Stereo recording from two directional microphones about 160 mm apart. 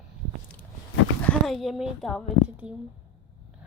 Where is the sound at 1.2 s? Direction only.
Centre (ahead or behind).